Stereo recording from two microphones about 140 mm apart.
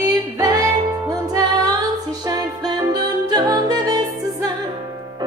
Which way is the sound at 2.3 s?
30° right (ahead or behind).